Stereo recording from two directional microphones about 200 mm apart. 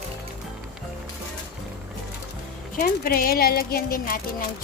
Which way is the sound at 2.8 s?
45° left (ahead or behind).